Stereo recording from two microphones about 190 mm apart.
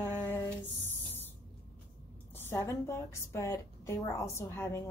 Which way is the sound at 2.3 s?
10° left (ahead or behind).